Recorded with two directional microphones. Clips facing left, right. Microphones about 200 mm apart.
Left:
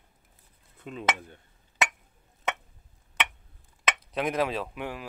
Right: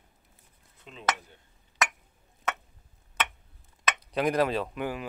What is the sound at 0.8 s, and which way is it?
Speech, 50° left (ahead or behind).